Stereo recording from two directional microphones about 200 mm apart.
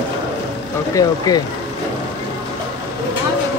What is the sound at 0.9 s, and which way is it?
Speech, 20° left (ahead or behind).